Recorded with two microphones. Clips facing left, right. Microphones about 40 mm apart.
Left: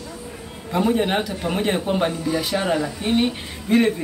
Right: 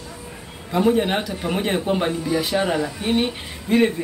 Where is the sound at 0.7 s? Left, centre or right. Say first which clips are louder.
Right 1 dB; centre.